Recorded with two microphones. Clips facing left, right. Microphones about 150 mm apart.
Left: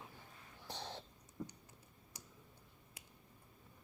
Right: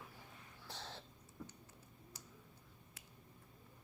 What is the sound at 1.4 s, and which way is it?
Computer keyboard, 15° left (ahead or behind).